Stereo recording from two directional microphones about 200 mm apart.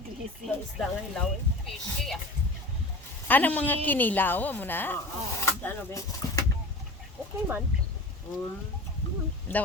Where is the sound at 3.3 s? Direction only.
10° left (ahead or behind).